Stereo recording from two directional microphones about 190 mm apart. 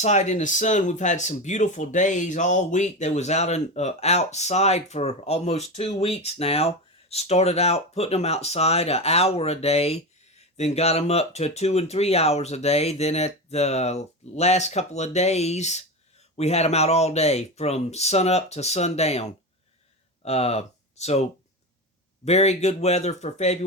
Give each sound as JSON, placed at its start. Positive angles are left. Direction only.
{"t": 0.0, "sound": "speech", "side_deg": 35}